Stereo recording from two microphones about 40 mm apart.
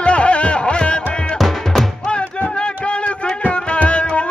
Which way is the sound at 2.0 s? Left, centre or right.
Left.